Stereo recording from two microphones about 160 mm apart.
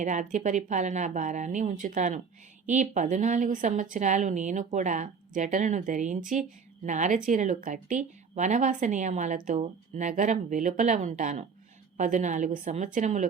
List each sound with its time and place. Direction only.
0.0 s speech: 50° right (ahead or behind)